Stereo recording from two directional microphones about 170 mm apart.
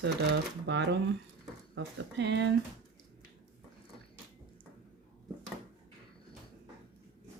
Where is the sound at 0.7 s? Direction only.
90° right.